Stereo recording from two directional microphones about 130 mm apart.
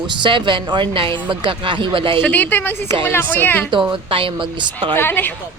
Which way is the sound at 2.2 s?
15° left (ahead or behind).